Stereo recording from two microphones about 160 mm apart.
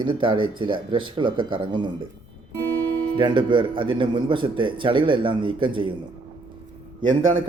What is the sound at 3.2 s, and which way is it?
Speech, 30° right (ahead or behind).